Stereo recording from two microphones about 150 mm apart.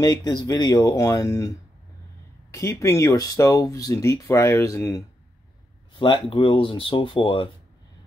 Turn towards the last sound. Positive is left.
turn(degrees=35)  # may be behind; listen again after turning